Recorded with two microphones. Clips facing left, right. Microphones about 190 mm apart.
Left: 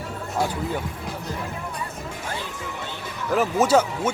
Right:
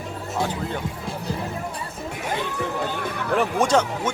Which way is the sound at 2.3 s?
65° right (ahead or behind).